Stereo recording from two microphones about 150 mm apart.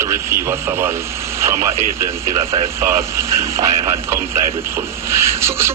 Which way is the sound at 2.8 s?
20° right (ahead or behind).